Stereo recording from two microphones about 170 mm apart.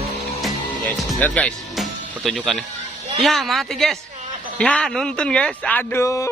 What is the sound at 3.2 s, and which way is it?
A man's voice, centre (ahead or behind).